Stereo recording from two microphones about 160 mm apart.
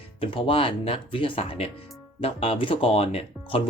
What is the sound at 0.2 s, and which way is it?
Speech, 35° left (ahead or behind).